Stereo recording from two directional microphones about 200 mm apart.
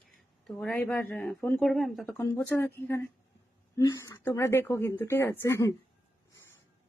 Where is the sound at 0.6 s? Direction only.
5° left (ahead or behind).